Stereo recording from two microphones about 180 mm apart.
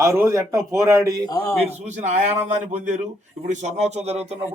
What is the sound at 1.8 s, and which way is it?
A man's voice, 40° right (ahead or behind).